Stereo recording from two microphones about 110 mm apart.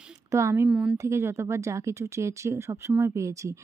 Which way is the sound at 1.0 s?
25° right (ahead or behind).